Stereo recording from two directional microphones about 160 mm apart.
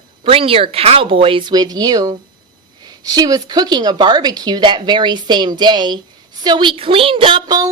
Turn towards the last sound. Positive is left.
turn(degrees=-25)  # may be behind; listen again after turning